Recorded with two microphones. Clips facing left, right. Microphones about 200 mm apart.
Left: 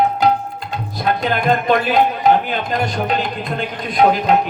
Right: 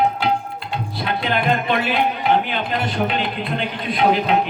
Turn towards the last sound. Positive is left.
turn(degrees=45)  # may be behind; listen again after turning